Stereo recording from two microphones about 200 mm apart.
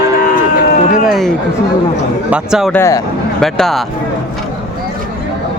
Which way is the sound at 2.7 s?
15° left (ahead or behind).